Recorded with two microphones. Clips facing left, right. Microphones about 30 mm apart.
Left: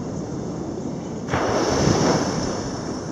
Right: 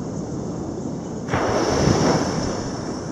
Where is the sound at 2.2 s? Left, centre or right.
Centre.